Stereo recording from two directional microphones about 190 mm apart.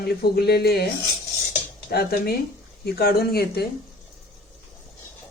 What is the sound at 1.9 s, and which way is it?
Speech, 55° left (ahead or behind).